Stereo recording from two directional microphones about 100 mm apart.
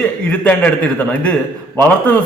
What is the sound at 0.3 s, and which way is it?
A man's voice, 15° left (ahead or behind).